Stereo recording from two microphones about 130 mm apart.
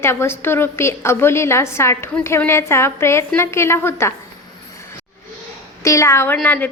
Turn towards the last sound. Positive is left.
turn(degrees=10)  # may be behind; listen again after turning